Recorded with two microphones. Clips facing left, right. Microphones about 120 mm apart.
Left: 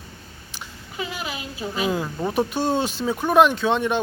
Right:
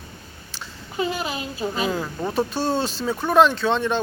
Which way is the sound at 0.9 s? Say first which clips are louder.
Right 5 dB; 35° right (ahead or behind).